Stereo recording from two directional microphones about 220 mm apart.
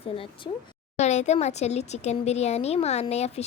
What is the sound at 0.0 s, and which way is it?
Speech, 25° left (ahead or behind).